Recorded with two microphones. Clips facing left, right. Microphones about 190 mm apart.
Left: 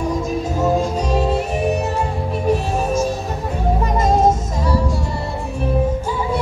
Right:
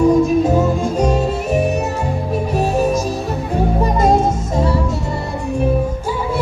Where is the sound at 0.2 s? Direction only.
55° right (ahead or behind).